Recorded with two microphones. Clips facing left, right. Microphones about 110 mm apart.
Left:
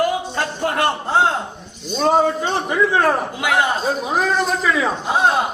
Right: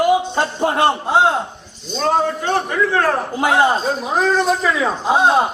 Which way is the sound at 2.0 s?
15° left (ahead or behind).